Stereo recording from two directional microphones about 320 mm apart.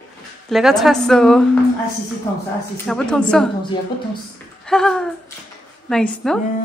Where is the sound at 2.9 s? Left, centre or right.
Centre.